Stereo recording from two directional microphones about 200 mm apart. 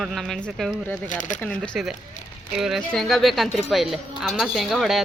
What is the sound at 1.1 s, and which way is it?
Speech, 40° left (ahead or behind).